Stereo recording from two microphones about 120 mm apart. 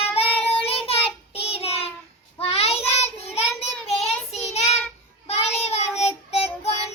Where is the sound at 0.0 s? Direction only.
55° left (ahead or behind).